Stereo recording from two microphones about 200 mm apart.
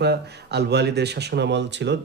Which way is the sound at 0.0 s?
55° right (ahead or behind).